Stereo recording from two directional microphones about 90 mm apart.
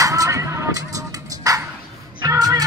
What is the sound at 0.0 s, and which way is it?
Music, 40° right (ahead or behind).